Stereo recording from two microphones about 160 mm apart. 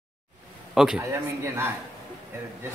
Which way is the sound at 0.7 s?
5° right (ahead or behind).